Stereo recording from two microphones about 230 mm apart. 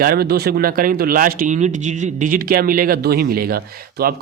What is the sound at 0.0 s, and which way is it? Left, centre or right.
Speech, right.